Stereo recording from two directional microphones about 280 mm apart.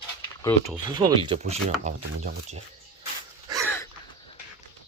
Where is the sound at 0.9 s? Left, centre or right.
Centre.